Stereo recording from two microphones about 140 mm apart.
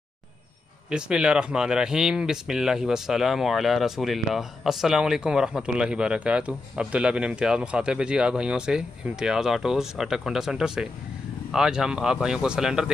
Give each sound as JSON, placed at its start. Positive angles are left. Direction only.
{"t": 0.8, "sound": "speech", "side_deg": -5}